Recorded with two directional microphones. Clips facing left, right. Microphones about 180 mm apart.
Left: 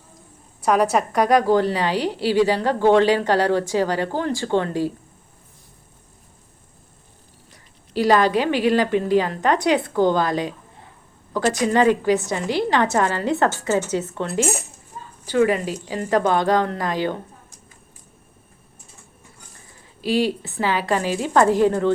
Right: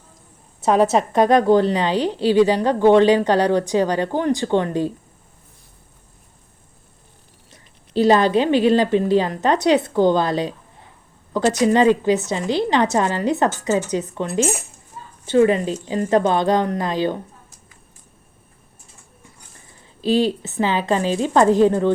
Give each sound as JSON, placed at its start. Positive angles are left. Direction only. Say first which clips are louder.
{"t": 0.6, "sound": "a woman's voice", "louder": "right 2 dB", "side_deg": -25}
{"t": 7.5, "sound": "a woman's voice", "louder": "right 4 dB", "side_deg": -25}
{"t": 20.0, "sound": "a woman's voice", "louder": "right 3 dB", "side_deg": -20}